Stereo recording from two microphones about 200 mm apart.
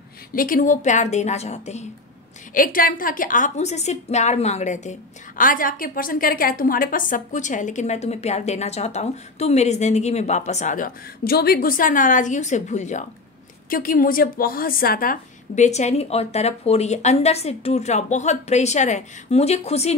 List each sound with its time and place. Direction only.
0.3 s a woman's voice: 45° left (ahead or behind)
2.5 s a woman's voice: 45° left (ahead or behind)